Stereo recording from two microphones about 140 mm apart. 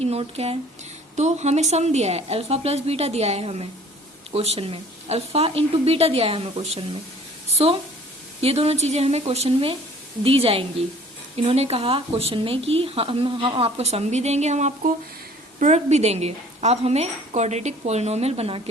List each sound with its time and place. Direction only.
0.0 s a woman's voice: 45° right (ahead or behind)
1.1 s a woman's voice: 55° right (ahead or behind)
8.4 s a woman's voice: 45° right (ahead or behind)